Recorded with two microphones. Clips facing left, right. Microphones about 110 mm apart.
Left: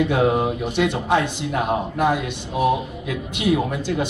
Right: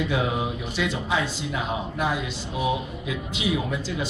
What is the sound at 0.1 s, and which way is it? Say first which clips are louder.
Speech: left 7 dB; 55° left (ahead or behind).